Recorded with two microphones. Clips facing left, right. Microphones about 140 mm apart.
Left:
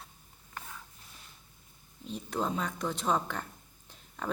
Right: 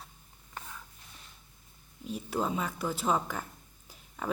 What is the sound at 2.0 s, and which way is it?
Speech, 5° right (ahead or behind).